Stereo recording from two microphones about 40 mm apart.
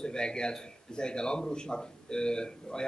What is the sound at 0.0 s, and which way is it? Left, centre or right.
A man's voice, centre.